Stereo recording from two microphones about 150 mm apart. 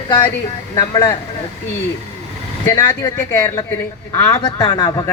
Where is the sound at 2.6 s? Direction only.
20° left (ahead or behind).